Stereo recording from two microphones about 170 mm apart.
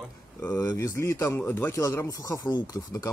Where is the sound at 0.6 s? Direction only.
20° left (ahead or behind).